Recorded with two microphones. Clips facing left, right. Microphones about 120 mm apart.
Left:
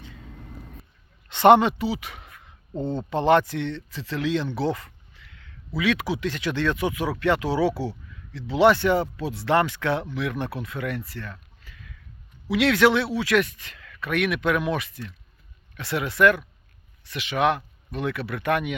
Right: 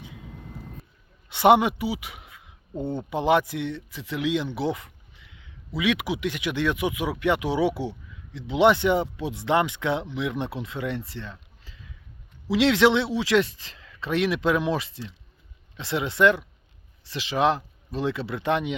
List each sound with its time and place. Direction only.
1.3 s speech: 10° right (ahead or behind)